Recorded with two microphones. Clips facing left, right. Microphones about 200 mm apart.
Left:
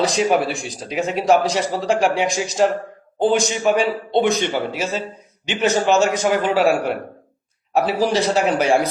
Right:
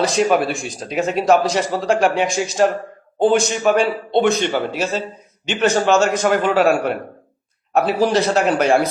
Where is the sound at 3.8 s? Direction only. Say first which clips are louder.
Right 1 dB; 15° right (ahead or behind).